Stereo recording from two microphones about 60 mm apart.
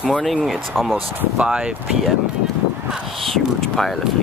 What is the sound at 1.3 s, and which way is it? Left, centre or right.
Speech, centre.